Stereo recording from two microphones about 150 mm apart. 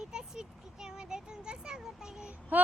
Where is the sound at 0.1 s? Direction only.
5° right (ahead or behind).